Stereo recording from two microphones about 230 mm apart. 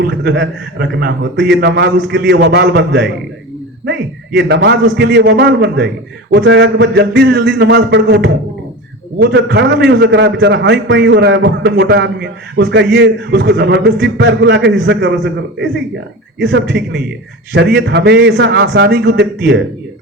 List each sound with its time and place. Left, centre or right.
0.0 s a man's voice: right